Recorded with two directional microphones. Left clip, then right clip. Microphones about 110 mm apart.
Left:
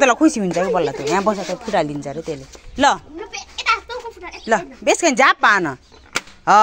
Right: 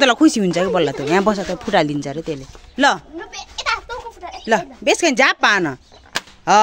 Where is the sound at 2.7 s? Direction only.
35° right (ahead or behind).